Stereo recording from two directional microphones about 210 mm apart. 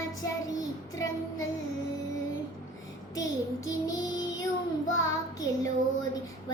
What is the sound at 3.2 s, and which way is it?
Child singing, 15° left (ahead or behind).